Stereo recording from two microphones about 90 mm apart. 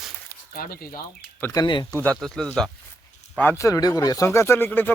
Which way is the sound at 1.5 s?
55° left (ahead or behind).